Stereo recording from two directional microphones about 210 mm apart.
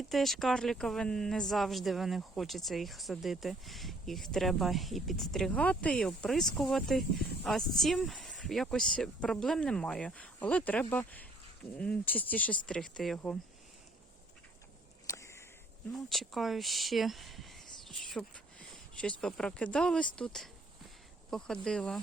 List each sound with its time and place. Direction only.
0.0 s speech: centre (ahead or behind)
15.0 s a sound: 15° left (ahead or behind)
16.0 s speech: centre (ahead or behind)